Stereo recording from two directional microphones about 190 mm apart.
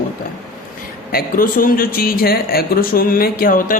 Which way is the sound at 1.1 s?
50° left (ahead or behind).